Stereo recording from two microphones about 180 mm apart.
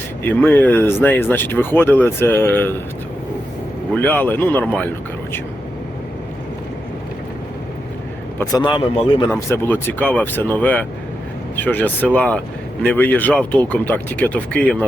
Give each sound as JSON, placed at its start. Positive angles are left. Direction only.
{"t": 0.3, "sound": "speech", "side_deg": 10}
{"t": 3.9, "sound": "speech", "side_deg": 10}
{"t": 8.5, "sound": "speech", "side_deg": 25}
{"t": 9.3, "sound": "speech", "side_deg": 15}